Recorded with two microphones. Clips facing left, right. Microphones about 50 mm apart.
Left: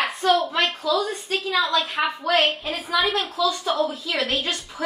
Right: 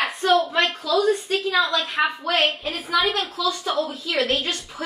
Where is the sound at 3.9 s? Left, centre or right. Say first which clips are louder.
Right 2 dB; right.